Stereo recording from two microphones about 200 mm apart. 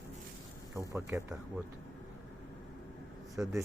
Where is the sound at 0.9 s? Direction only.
15° right (ahead or behind).